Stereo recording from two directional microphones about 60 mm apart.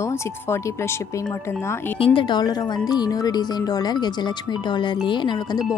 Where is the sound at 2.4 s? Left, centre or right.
Left.